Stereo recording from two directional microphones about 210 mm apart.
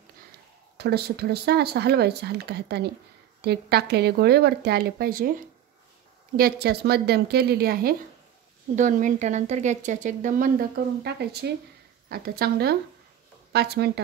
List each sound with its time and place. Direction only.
0.7 s speech: 50° right (ahead or behind)
8.7 s speech: 35° right (ahead or behind)
11.1 s speech: 50° right (ahead or behind)